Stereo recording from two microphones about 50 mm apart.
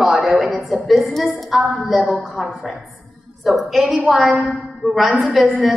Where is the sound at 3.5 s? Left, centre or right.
Centre.